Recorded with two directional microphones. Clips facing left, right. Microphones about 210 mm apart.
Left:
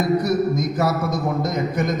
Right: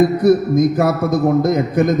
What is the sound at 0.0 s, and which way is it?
A man's voice, 55° right (ahead or behind).